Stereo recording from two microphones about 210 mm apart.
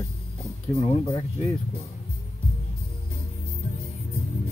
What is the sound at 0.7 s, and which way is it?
Speech, 30° left (ahead or behind).